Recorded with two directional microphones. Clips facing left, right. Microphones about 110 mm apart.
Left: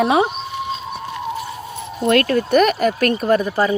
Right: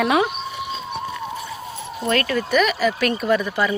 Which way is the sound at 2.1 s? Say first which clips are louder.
Left 5 dB; 50° left (ahead or behind).